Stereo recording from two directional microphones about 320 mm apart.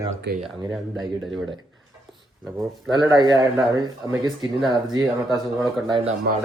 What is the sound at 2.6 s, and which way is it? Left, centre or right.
Speech, centre.